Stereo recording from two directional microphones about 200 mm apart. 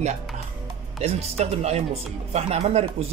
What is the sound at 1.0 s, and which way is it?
Speech, 30° right (ahead or behind).